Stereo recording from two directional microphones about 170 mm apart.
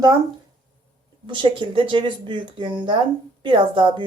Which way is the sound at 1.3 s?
30° right (ahead or behind).